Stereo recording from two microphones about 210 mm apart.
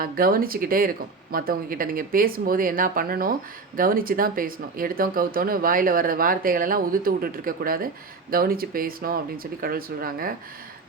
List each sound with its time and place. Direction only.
0.0 s speech: 45° right (ahead or behind)